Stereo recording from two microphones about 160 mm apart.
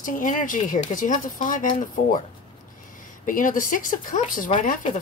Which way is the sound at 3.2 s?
55° left (ahead or behind).